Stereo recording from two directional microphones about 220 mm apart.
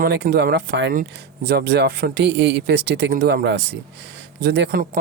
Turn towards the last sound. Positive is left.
turn(degrees=-40)  # may be behind; listen again after turning